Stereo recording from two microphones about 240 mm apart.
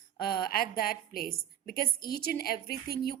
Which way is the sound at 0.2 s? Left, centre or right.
Left.